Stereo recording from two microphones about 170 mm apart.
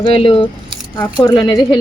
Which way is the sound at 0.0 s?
30° left (ahead or behind).